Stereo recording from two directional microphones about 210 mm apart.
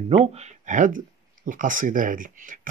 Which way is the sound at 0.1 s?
30° right (ahead or behind).